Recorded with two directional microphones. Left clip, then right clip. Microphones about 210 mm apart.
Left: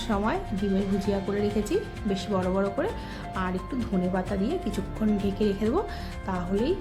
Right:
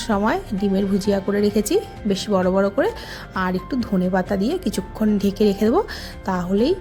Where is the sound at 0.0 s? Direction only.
35° right (ahead or behind).